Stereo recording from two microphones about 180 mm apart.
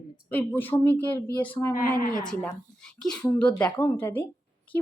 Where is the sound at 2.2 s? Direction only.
5° left (ahead or behind).